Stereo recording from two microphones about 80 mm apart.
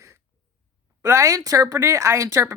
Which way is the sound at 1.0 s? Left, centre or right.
Right.